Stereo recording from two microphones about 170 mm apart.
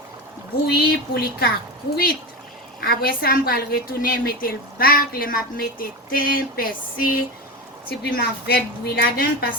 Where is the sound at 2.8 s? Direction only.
65° left (ahead or behind).